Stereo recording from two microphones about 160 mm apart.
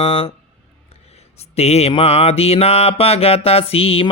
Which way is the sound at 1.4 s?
40° left (ahead or behind).